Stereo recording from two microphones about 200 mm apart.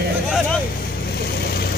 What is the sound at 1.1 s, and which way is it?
Vehicle, 50° left (ahead or behind).